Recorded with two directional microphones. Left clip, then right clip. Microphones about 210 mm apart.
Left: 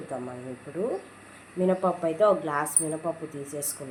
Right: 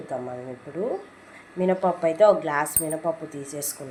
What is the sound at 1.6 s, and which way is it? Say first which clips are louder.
A woman's voice: right 2 dB; 15° right (ahead or behind).